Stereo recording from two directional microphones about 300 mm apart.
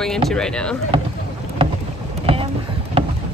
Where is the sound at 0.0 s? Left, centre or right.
Centre.